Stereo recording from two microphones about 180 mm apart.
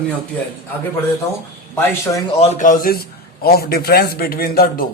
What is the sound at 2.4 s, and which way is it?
A man's voice, 40° left (ahead or behind).